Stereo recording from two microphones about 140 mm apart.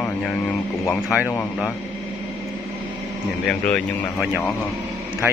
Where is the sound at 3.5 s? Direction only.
5° left (ahead or behind).